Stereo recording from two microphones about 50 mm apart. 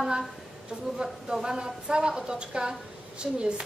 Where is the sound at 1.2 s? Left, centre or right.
Centre.